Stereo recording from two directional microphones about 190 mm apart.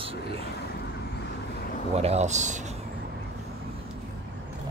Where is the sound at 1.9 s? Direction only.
35° right (ahead or behind).